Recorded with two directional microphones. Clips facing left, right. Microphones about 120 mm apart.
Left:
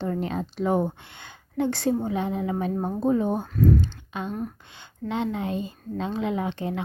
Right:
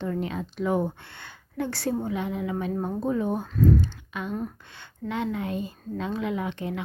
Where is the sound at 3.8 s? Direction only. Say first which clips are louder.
Left 1 dB; 25° left (ahead or behind).